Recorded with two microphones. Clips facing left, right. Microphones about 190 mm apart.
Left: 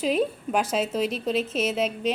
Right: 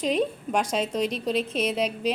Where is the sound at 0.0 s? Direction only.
5° left (ahead or behind).